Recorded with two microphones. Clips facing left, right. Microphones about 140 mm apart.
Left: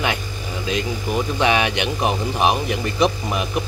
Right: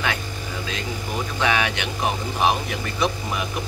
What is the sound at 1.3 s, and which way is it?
Speech, 20° left (ahead or behind).